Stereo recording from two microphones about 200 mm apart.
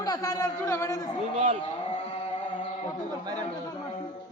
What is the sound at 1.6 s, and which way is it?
Carnatic music, 30° left (ahead or behind).